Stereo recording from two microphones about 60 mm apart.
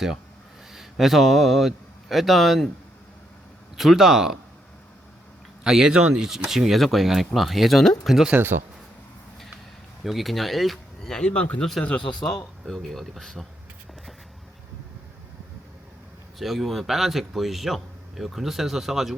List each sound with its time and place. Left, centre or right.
0.7 s speech: centre
3.8 s speech: centre
5.6 s speech: centre
8.4 s a man's voice: right
10.0 s a man's voice: centre
12.6 s a man's voice: centre
16.4 s a man's voice: centre